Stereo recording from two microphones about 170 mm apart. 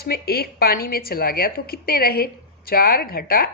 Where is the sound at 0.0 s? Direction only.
65° left (ahead or behind).